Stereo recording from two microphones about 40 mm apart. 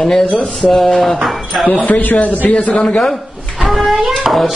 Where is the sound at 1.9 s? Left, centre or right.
Left.